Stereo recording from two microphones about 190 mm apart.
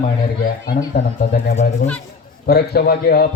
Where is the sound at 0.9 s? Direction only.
55° left (ahead or behind).